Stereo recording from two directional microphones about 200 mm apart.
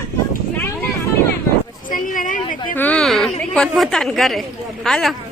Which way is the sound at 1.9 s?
40° left (ahead or behind).